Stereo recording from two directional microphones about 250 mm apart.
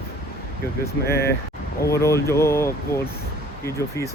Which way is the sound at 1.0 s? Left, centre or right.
Left.